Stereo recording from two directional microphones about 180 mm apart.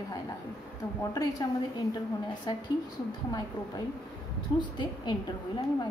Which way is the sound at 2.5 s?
25° left (ahead or behind).